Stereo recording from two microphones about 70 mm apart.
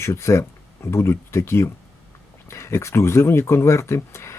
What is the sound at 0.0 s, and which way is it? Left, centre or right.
Speech, left.